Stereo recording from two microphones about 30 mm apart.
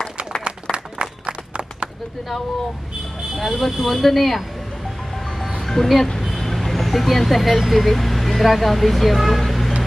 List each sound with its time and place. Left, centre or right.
0.4 s applause: right
1.3 s a sound: right
3.3 s speech: centre
5.1 s music: centre
5.6 s speech: centre
6.1 s vehicle: centre
7.8 s speech: centre